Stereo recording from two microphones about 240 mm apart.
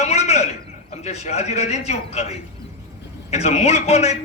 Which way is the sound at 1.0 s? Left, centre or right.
Left.